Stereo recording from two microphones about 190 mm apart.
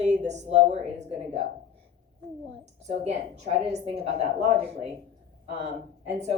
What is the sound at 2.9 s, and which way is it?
A woman's voice, 35° right (ahead or behind).